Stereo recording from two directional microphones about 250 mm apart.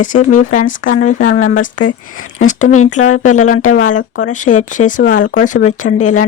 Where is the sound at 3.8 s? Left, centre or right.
Left.